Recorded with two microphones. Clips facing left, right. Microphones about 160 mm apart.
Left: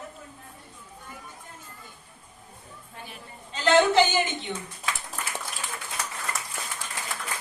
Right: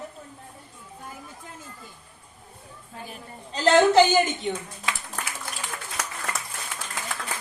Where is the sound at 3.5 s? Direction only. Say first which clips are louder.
Right 3 dB; 40° right (ahead or behind).